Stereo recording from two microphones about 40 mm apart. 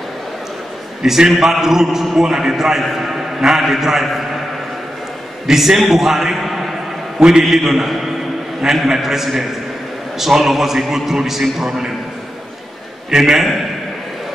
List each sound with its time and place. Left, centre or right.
1.0 s a man's voice: centre
5.5 s a man's voice: centre
7.2 s a man's voice: centre
7.4 s a man's voice: centre
13.1 s a man's voice: centre